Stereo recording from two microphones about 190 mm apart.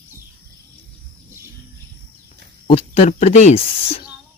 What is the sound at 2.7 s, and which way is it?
Speech, 35° left (ahead or behind).